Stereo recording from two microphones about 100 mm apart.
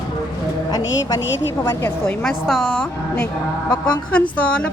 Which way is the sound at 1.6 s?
25° left (ahead or behind).